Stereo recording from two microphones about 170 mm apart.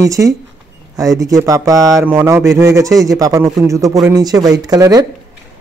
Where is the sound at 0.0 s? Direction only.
20° right (ahead or behind).